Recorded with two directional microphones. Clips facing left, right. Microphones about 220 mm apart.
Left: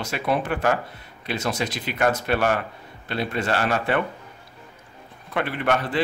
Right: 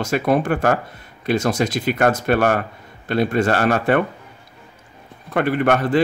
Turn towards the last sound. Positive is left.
turn(degrees=-45)  # may be behind; listen again after turning